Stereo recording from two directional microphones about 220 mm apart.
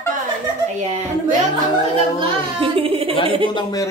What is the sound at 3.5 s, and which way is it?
Speech, 20° left (ahead or behind).